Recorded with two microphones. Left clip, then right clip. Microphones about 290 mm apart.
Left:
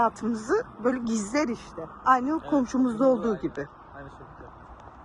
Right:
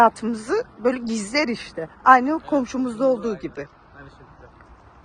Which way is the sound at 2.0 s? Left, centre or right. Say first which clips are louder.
Right 8 dB; right.